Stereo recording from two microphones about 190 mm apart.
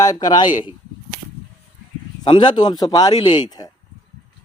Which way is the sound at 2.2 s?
25° left (ahead or behind).